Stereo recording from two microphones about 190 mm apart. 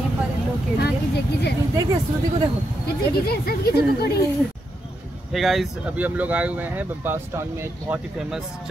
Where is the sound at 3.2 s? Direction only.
55° left (ahead or behind).